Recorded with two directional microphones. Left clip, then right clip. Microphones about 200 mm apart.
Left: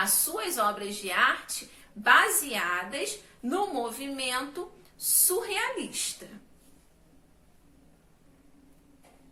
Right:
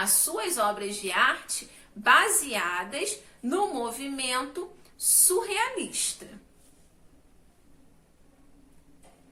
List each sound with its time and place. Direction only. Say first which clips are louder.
0.0 s a woman's voice: right 1 dB; 20° right (ahead or behind)